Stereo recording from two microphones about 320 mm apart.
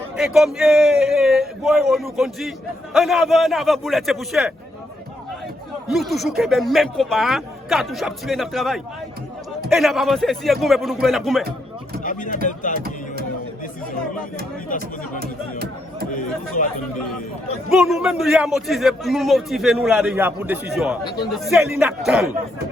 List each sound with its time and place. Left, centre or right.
0.2 s a man's voice: centre
5.9 s a man's voice: centre
12.5 s speech: left
14.7 s speech: left
15.2 s music: right
16.6 s speech: left
17.7 s a man's voice: centre